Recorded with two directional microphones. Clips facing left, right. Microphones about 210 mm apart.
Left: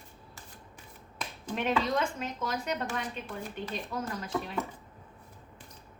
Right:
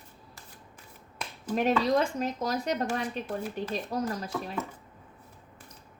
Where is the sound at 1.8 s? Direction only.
40° right (ahead or behind).